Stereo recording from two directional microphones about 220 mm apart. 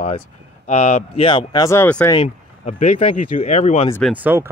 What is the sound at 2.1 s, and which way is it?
Speech, 30° left (ahead or behind).